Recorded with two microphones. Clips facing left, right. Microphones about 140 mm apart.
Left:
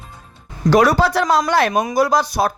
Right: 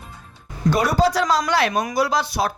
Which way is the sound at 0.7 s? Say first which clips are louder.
Left 5 dB; 90° left.